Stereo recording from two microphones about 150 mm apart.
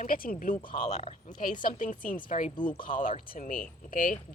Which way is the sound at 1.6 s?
60° left (ahead or behind).